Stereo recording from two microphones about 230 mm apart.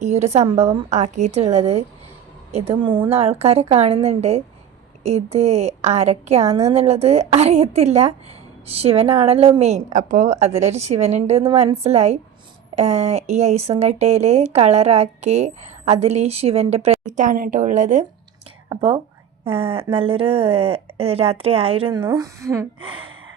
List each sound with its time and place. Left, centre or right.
0.0 s a woman's voice: right